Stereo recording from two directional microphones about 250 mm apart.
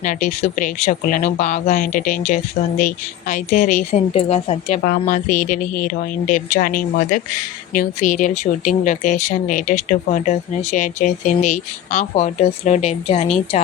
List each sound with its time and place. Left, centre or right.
0.0 s a woman's voice: left